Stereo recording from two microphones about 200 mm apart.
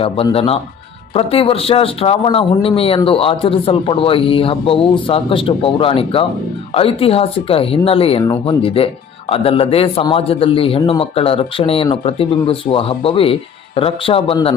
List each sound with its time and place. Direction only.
0.0 s a man's voice: 30° left (ahead or behind)